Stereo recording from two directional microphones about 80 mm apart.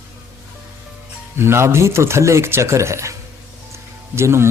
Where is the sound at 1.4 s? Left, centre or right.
Right.